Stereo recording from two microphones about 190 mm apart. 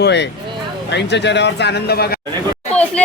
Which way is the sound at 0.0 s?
65° left (ahead or behind).